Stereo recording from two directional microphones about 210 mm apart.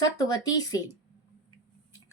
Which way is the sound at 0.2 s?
15° left (ahead or behind).